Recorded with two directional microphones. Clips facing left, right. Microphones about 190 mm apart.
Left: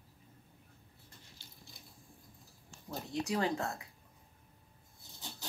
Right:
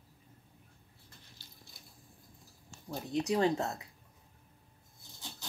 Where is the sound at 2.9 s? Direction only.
20° right (ahead or behind).